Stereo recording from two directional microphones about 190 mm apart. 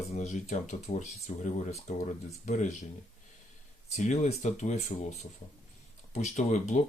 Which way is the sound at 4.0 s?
35° left (ahead or behind).